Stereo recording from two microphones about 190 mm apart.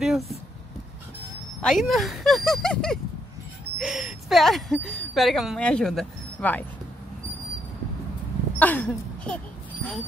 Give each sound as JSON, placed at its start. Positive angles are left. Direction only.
{"t": 0.0, "sound": "speech", "side_deg": 0}
{"t": 1.6, "sound": "a woman's voice", "side_deg": 0}
{"t": 8.5, "sound": "speech", "side_deg": 10}